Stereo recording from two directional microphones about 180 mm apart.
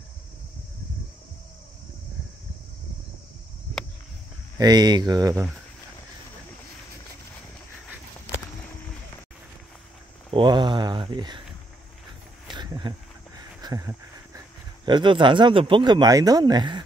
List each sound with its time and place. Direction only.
4.6 s speech: 20° right (ahead or behind)
10.3 s speech: 25° right (ahead or behind)
12.4 s a sound: 25° right (ahead or behind)
14.9 s speech: 25° right (ahead or behind)